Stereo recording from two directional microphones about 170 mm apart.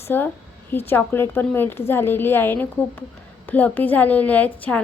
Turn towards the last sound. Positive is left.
turn(degrees=10)  # may be behind; listen again after turning